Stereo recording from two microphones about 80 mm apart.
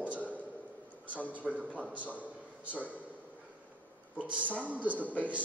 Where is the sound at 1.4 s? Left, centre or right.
Centre.